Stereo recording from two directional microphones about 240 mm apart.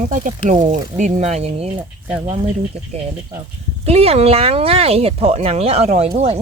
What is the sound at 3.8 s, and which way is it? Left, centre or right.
Speech, right.